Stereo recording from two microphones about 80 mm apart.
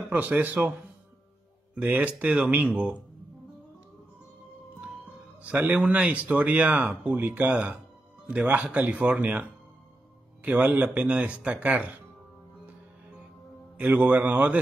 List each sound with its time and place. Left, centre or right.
0.0 s a man's voice: centre
1.8 s speech: centre
5.4 s speech: centre
13.7 s speech: centre